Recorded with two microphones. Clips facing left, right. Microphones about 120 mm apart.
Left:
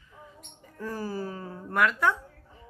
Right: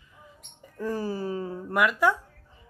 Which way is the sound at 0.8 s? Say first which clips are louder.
Right 4 dB; 15° right (ahead or behind).